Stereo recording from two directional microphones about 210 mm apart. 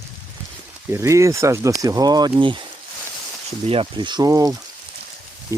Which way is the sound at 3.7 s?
25° right (ahead or behind).